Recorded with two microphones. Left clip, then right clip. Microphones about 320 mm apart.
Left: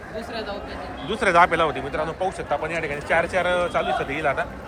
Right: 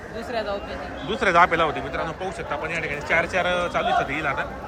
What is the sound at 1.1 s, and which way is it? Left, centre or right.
A man's voice, centre.